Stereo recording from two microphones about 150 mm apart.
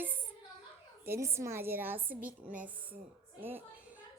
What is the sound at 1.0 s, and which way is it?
A woman's voice, 15° right (ahead or behind).